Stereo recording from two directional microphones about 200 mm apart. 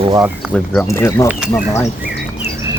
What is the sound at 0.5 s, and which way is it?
Speech, 5° left (ahead or behind).